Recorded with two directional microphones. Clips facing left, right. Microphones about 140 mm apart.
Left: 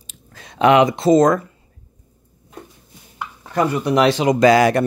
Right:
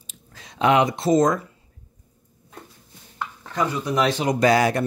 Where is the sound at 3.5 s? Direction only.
65° left (ahead or behind); by 4.8 s 85° left.